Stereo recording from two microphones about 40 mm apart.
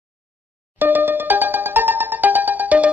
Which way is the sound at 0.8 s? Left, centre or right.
Right.